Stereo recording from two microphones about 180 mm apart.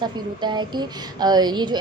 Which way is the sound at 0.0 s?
25° right (ahead or behind).